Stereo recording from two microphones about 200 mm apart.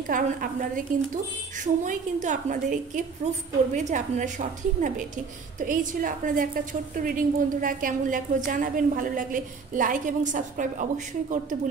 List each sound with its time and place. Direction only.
0.1 s a woman's voice: 45° right (ahead or behind)
1.9 s a woman's voice: 40° right (ahead or behind)